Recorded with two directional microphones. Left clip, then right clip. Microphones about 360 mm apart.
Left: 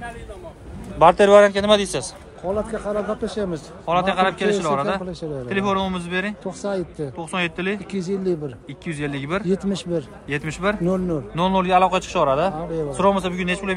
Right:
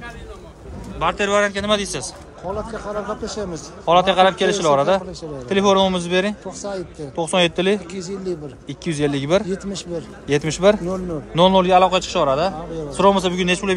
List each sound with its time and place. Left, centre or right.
0.9 s a man's voice: centre
2.7 s speech: left
3.8 s a man's voice: centre
6.6 s speech: left
7.2 s speech: centre
7.9 s speech: left
8.6 s speech: centre
9.5 s speech: left
10.2 s a man's voice: centre